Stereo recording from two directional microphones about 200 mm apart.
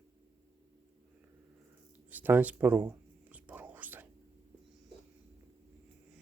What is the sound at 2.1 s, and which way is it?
Whispering, 10° right (ahead or behind).